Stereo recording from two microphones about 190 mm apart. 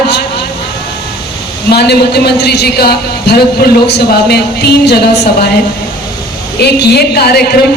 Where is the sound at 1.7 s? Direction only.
60° left (ahead or behind).